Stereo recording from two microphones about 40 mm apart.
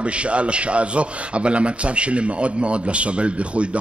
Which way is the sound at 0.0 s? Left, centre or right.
Right.